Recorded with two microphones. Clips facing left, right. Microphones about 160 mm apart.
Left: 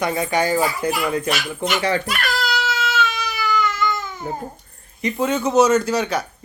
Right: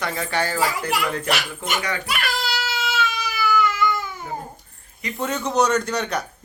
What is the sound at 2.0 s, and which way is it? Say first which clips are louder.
Baby cry: left 2 dB; 5° right (ahead or behind).